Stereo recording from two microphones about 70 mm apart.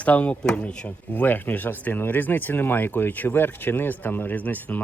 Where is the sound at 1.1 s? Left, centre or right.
Left.